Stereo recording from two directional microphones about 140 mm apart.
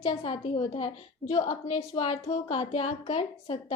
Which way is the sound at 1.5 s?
30° left (ahead or behind).